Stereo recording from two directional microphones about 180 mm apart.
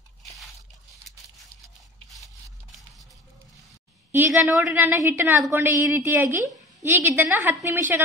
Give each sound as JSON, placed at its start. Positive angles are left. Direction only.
{"t": 2.1, "sound": "scrape", "side_deg": -20}
{"t": 4.1, "sound": "a woman's voice", "side_deg": -10}